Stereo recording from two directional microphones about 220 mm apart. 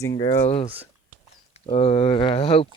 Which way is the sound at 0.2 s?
20° left (ahead or behind).